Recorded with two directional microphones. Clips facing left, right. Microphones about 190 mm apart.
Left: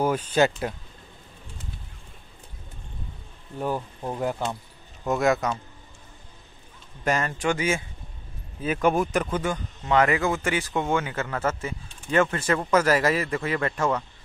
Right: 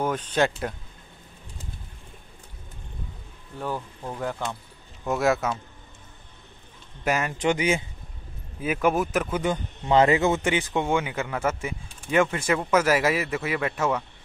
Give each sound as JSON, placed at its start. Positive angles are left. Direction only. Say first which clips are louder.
{"t": 0.0, "sound": "speech", "louder": "left 2 dB", "side_deg": 10}
{"t": 3.5, "sound": "speech", "louder": "left 3 dB", "side_deg": 15}
{"t": 5.0, "sound": "speech", "louder": "left 1 dB", "side_deg": 0}
{"t": 7.1, "sound": "speech", "louder": "right 1 dB", "side_deg": -10}
{"t": 8.5, "sound": "speech", "louder": "left 1 dB", "side_deg": -5}
{"t": 9.8, "sound": "speech", "louder": "right 2 dB", "side_deg": -25}